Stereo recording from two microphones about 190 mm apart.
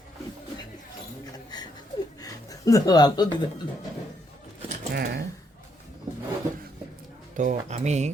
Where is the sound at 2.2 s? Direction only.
20° left (ahead or behind).